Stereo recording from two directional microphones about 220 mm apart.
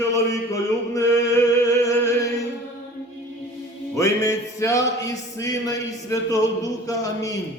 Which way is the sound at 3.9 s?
15° left (ahead or behind).